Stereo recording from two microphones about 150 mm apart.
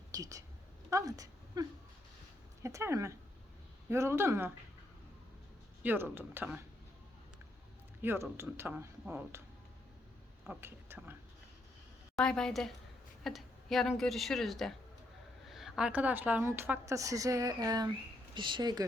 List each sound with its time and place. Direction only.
0.1 s speech: 25° right (ahead or behind)
0.9 s a sound: 20° right (ahead or behind)
2.6 s a woman's voice: 20° right (ahead or behind)
5.8 s a woman's voice: 15° right (ahead or behind)
8.0 s a woman's voice: 15° right (ahead or behind)
10.4 s speech: 10° right (ahead or behind)
12.1 s a woman's voice: 5° left (ahead or behind); by 18.9 s 30° right (ahead or behind)